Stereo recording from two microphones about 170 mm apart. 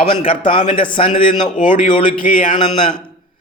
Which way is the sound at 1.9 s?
30° left (ahead or behind).